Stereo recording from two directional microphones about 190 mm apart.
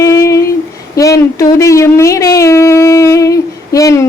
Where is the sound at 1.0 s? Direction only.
15° left (ahead or behind).